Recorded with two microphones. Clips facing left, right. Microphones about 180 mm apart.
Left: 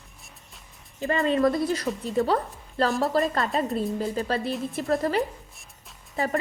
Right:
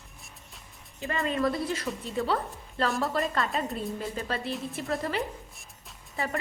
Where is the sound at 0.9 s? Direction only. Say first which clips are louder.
Left 6 dB; 35° left (ahead or behind).